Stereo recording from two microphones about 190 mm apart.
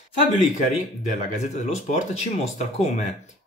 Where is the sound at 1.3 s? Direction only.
40° left (ahead or behind).